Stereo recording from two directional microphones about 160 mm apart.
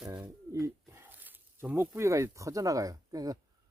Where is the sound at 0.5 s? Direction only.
20° right (ahead or behind).